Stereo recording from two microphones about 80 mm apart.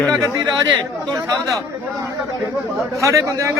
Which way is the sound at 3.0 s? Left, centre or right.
Right.